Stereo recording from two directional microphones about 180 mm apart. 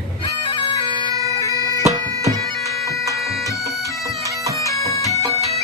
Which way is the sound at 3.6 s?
20° right (ahead or behind).